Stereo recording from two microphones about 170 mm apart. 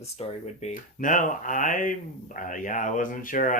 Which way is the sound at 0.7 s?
50° left (ahead or behind).